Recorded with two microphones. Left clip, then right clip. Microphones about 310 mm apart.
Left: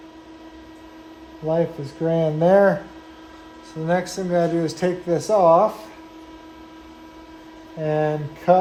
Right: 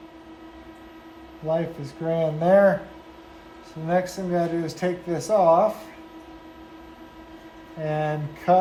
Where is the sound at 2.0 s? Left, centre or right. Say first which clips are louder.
Left 4 dB; left.